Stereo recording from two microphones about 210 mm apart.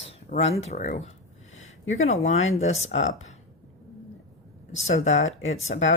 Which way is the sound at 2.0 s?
30° left (ahead or behind).